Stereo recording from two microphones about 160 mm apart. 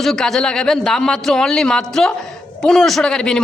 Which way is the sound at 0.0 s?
Centre (ahead or behind).